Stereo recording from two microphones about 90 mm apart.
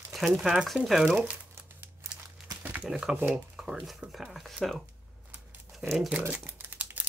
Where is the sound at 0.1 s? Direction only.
Centre (ahead or behind).